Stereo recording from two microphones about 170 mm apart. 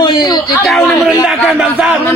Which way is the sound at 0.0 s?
25° left (ahead or behind).